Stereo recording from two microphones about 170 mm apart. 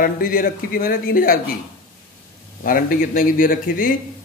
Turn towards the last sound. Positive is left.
turn(degrees=55)  # may be behind; listen again after turning